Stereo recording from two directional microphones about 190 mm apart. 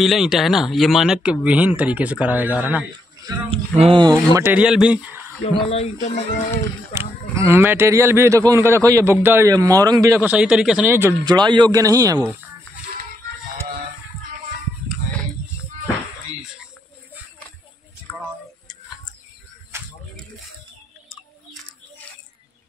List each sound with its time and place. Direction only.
0.0 s a man's voice: centre (ahead or behind)
3.3 s a man's voice: 30° right (ahead or behind); by 5.2 s 5° right (ahead or behind)
5.4 s speech: 30° left (ahead or behind)
6.9 s a man's voice: 15° right (ahead or behind)
18.1 s tick-tock: 15° left (ahead or behind)
19.7 s a sound: 15° right (ahead or behind)